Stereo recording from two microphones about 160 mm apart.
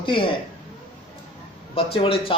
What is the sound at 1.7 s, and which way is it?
Speech, 35° left (ahead or behind).